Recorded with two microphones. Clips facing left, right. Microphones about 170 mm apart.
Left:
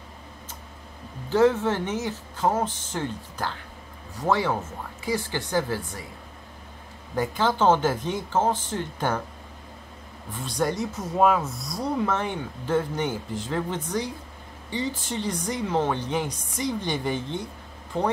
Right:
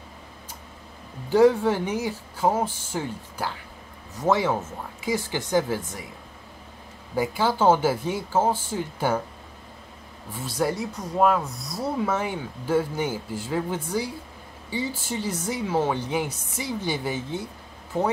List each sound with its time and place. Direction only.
1.3 s speech: 10° right (ahead or behind)
7.2 s speech: 10° right (ahead or behind)
10.3 s speech: 5° right (ahead or behind)